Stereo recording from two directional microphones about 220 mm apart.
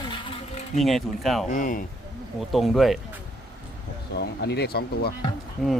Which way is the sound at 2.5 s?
Centre (ahead or behind).